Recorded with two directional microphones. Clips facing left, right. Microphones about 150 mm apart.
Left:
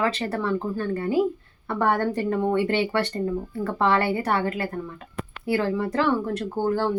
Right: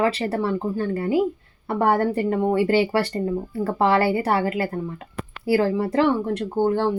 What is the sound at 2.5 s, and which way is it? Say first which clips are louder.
A woman's voice: right 3 dB; 30° right (ahead or behind).